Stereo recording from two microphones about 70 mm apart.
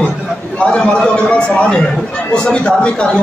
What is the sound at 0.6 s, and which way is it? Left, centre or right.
A man's voice, centre.